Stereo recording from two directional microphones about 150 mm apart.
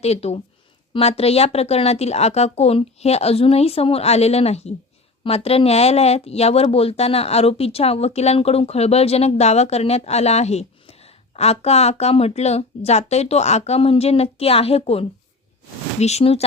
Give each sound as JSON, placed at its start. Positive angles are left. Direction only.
{"t": 0.0, "sound": "speech", "side_deg": 45}